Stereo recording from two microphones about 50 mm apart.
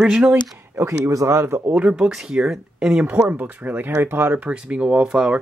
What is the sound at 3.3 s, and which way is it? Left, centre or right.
Speech, right.